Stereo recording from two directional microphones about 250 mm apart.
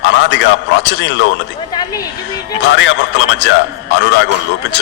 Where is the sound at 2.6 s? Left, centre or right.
Left.